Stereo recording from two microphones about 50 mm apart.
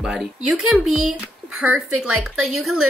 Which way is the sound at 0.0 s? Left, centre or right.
Centre.